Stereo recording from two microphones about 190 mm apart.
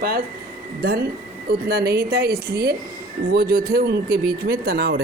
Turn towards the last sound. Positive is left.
turn(degrees=-60)  # may be behind; listen again after turning